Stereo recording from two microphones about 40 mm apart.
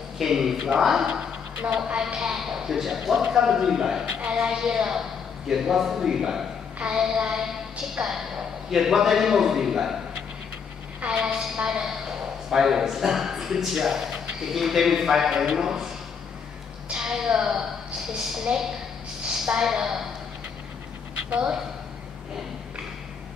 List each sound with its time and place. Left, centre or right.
0.2 s a man's voice: centre
1.6 s a woman's voice: right
2.1 s a man's voice: centre
11.1 s a woman's voice: right
16.9 s a man's voice: centre